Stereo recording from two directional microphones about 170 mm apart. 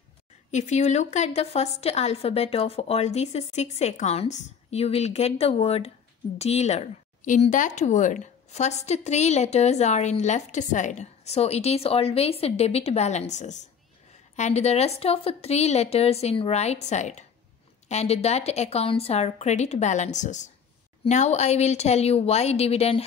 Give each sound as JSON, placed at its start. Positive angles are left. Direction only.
{"t": 0.5, "sound": "a woman's voice", "side_deg": 45}